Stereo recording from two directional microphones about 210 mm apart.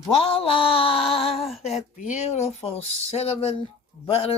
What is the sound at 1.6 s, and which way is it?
Speech, 30° left (ahead or behind).